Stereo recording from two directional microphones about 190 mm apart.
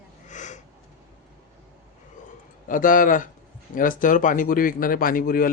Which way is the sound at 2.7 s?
45° left (ahead or behind).